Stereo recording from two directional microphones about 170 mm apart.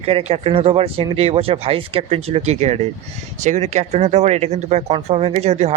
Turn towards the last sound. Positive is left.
turn(degrees=-40)  # may be behind; listen again after turning